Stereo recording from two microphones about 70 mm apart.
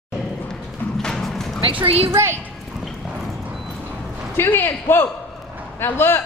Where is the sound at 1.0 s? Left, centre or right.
Centre.